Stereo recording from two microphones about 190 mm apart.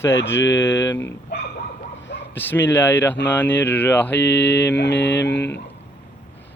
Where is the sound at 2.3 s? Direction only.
10° left (ahead or behind).